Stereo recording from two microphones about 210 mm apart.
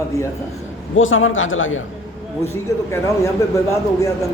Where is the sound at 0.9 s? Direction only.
70° left (ahead or behind).